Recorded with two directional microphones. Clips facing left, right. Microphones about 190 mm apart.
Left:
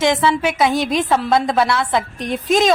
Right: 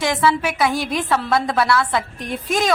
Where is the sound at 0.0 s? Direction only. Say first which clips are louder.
Left 3 dB; 20° left (ahead or behind).